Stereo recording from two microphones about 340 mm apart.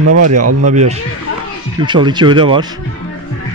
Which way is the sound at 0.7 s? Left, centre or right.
Centre.